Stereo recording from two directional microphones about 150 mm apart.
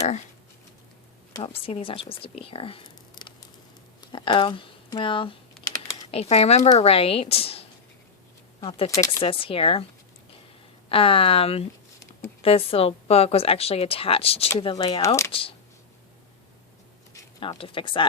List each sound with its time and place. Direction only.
1.4 s speech: 40° left (ahead or behind)
8.9 s speech: 20° left (ahead or behind)
9.2 s speech: 35° left (ahead or behind)
10.8 s speech: 35° left (ahead or behind); by 15.3 s 20° left (ahead or behind)
15.3 s speech: 35° left (ahead or behind)
17.6 s speech: 35° left (ahead or behind)